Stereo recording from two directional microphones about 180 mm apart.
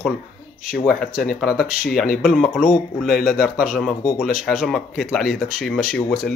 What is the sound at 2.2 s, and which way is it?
Speech, 5° left (ahead or behind).